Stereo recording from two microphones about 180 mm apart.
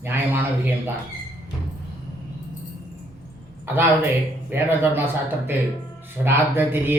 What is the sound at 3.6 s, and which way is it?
A man's voice, 10° right (ahead or behind).